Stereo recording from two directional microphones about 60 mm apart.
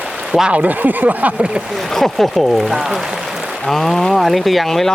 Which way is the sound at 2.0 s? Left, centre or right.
Centre.